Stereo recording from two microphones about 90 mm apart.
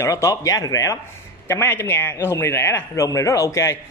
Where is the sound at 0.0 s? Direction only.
35° left (ahead or behind).